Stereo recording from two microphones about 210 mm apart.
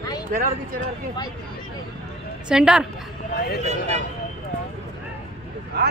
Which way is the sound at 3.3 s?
50° left (ahead or behind).